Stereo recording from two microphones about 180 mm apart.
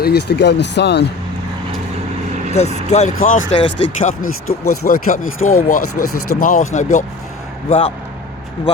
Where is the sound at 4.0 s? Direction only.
50° left (ahead or behind).